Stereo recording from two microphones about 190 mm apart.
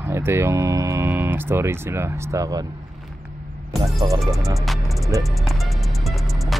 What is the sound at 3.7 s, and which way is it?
Speech, centre (ahead or behind).